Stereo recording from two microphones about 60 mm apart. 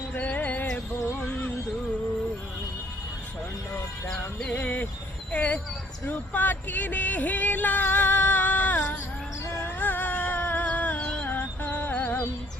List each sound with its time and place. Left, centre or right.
0.1 s music: left
4.4 s a sound: left
6.1 s music: left